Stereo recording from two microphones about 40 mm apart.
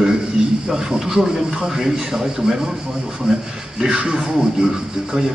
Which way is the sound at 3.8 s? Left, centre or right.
Right.